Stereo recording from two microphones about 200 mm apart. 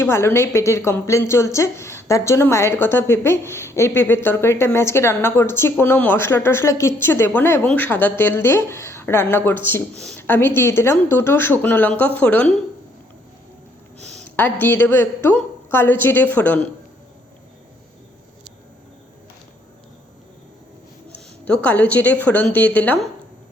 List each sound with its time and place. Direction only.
0.0 s a woman's voice: 15° left (ahead or behind)
14.2 s a woman's voice: 10° left (ahead or behind)
21.1 s a woman's voice: 5° left (ahead or behind)